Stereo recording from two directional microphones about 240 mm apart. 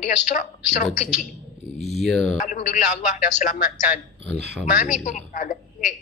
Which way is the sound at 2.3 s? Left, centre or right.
Left.